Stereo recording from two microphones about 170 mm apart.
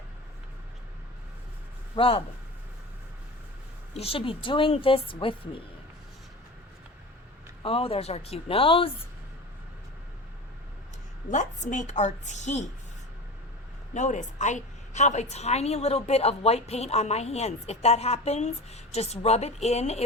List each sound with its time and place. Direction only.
2.0 s a woman's voice: 35° left (ahead or behind)
3.9 s a woman's voice: 35° left (ahead or behind)
7.6 s a woman's voice: 35° left (ahead or behind)
11.3 s a woman's voice: 45° left (ahead or behind)
13.9 s a woman's voice: 45° left (ahead or behind)